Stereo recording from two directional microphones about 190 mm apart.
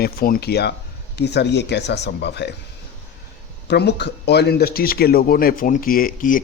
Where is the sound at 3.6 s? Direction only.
60° left (ahead or behind).